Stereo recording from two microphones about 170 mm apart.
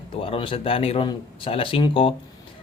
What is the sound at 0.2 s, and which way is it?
Speech, 30° left (ahead or behind).